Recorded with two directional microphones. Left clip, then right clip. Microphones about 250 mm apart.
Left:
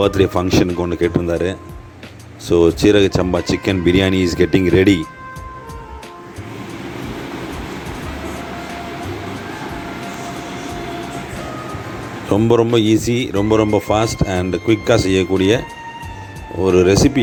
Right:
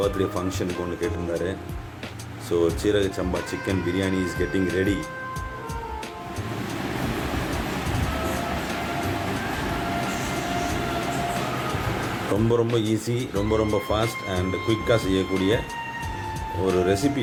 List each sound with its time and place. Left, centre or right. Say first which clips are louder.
0.0 s speech: left 9 dB; left
12.3 s speech: left 9 dB; left
16.7 s speech: left 11 dB; left